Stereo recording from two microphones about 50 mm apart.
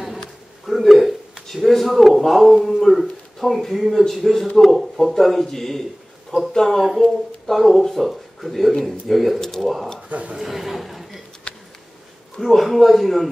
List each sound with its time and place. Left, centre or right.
0.0 s a sound: centre
4.1 s speech: centre
9.4 s speech: centre
10.0 s speech: right
10.3 s speech: centre
11.5 s a sound: centre
12.4 s speech: centre